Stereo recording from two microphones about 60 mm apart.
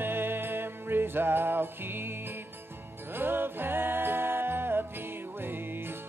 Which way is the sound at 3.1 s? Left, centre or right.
Right.